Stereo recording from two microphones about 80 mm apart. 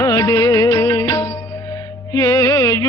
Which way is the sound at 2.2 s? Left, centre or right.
Left.